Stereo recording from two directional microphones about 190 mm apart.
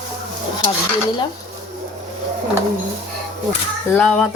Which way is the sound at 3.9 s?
5° left (ahead or behind).